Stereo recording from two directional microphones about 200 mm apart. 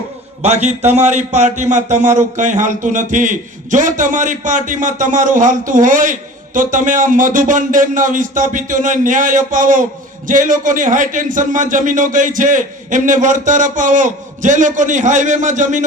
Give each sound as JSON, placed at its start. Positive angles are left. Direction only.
{"t": 0.4, "sound": "a man's voice", "side_deg": -35}